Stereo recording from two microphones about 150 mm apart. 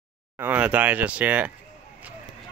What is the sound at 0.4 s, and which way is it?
Speech, 10° right (ahead or behind).